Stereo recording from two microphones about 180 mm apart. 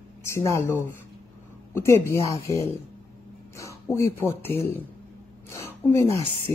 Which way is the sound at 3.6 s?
15° left (ahead or behind).